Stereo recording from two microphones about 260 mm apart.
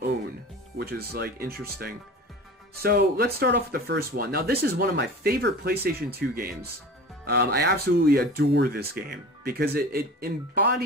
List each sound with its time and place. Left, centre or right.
0.7 s speech: right
2.8 s speech: right